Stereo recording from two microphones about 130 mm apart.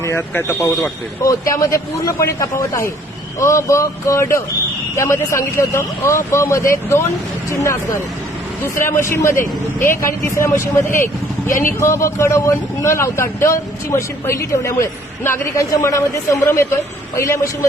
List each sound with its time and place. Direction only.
0.0 s speech: 20° left (ahead or behind)